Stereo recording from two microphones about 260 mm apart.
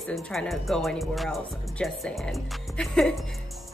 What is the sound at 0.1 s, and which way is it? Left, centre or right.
A woman's voice, centre.